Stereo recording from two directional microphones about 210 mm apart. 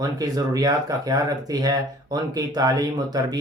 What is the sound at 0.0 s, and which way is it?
Speech, 20° right (ahead or behind).